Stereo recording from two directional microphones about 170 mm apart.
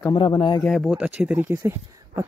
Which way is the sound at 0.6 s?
5° left (ahead or behind).